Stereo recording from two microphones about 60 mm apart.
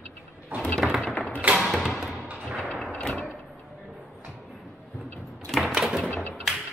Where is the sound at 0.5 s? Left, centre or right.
Right.